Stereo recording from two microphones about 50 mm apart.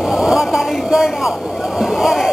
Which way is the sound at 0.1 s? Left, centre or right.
Centre.